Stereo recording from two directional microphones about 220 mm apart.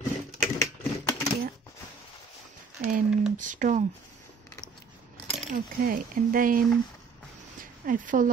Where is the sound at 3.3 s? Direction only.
35° right (ahead or behind).